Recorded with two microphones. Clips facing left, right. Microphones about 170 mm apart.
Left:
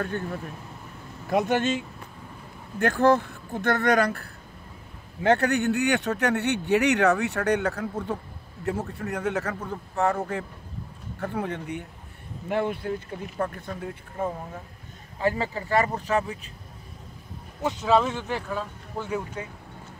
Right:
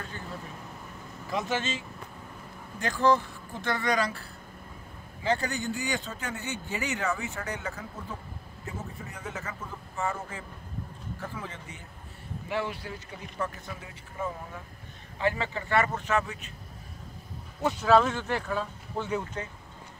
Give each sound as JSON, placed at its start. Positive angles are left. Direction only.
{"t": 0.0, "sound": "speech", "side_deg": 60}
{"t": 15.1, "sound": "speech", "side_deg": 40}
{"t": 17.8, "sound": "speech", "side_deg": 0}